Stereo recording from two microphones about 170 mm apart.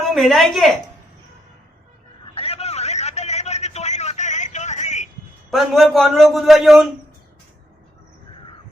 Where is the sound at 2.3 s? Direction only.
35° left (ahead or behind).